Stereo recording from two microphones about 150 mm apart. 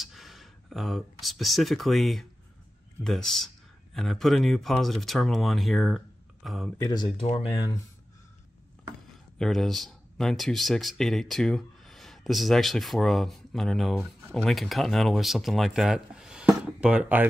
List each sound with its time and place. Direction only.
0.0 s speech: centre (ahead or behind)
6.8 s speech: 30° left (ahead or behind)
7.5 s speech: 25° left (ahead or behind)
9.4 s speech: centre (ahead or behind)